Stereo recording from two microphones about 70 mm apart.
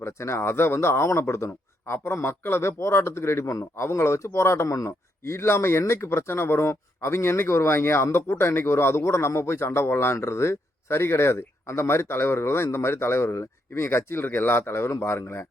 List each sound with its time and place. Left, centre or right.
0.0 s speech: left